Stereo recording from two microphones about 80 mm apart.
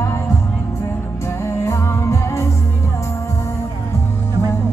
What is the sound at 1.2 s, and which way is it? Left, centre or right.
Music, left.